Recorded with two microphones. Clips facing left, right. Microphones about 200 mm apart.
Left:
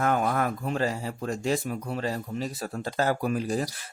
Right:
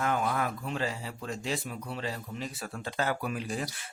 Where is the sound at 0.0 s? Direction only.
50° left (ahead or behind).